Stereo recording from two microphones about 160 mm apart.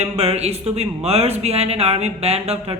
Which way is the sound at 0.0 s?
40° right (ahead or behind).